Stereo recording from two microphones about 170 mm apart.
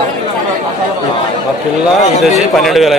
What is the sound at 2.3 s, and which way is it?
Speech, centre (ahead or behind).